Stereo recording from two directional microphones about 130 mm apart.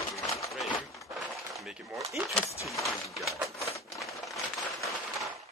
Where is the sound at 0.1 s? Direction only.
25° left (ahead or behind).